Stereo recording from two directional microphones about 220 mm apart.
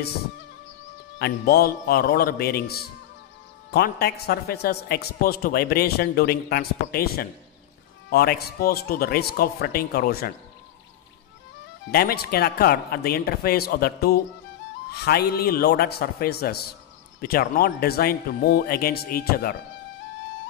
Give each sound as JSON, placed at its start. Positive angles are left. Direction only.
{"t": 1.2, "sound": "a man's voice", "side_deg": 45}
{"t": 11.9, "sound": "a man's voice", "side_deg": 45}